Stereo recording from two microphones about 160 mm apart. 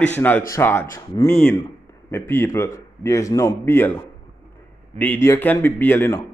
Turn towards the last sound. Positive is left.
turn(degrees=15)  # may be behind; listen again after turning